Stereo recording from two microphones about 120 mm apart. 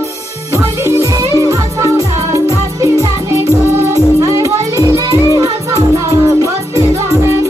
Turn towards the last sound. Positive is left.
turn(degrees=-25)  # may be behind; listen again after turning